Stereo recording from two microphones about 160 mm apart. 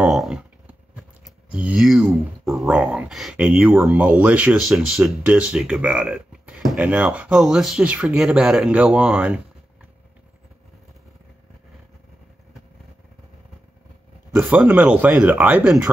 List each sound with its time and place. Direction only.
0.0 s a sound: 5° right (ahead or behind)
1.2 s speech: 5° right (ahead or behind)
14.4 s speech: 5° right (ahead or behind)